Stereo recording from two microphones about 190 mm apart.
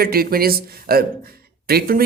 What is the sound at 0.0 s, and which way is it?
Speech, 55° right (ahead or behind).